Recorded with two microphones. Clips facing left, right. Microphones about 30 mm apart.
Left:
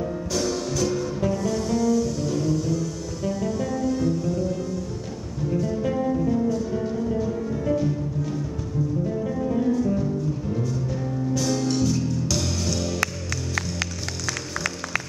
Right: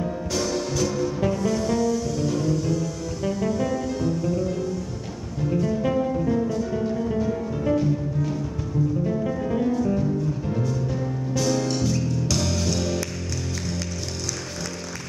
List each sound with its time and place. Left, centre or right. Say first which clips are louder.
0.0 s music: even; centre
9.0 s music: right 1 dB; centre